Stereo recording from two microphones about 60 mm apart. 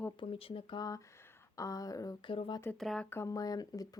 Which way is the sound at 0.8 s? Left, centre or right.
Left.